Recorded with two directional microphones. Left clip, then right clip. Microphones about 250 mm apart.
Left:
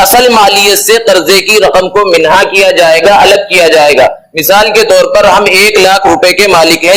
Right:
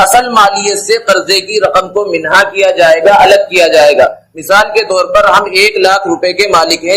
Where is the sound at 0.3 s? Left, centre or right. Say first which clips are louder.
Left 3 dB; left.